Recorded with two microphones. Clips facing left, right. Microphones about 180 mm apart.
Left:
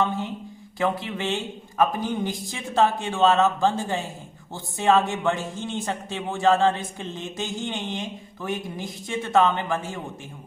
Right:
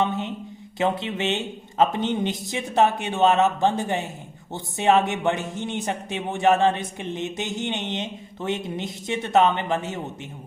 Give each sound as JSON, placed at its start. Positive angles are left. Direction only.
{"t": 0.0, "sound": "mantra", "side_deg": -20}
{"t": 0.8, "sound": "speech", "side_deg": -20}